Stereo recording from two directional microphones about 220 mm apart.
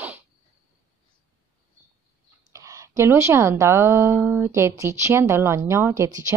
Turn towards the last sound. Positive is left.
turn(degrees=-10)  # may be behind; listen again after turning